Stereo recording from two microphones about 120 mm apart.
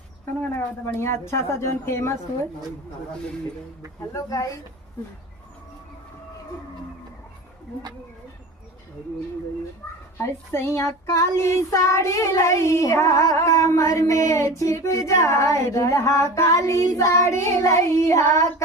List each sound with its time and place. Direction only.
0.5 s music: 20° left (ahead or behind)
4.1 s music: 30° left (ahead or behind)
10.2 s music: 20° left (ahead or behind)